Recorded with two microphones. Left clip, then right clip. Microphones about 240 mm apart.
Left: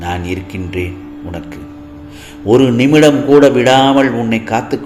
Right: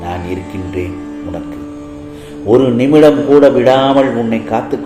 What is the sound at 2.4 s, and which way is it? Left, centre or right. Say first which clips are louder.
A man's voice: even; left.